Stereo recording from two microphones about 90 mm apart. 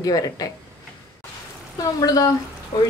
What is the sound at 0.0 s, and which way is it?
Speech, 40° left (ahead or behind).